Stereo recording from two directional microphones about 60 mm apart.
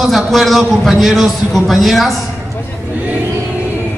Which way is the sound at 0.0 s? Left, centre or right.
Centre.